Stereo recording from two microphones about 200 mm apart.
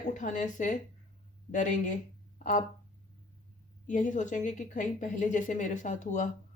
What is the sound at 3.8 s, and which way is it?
Speech, 40° left (ahead or behind).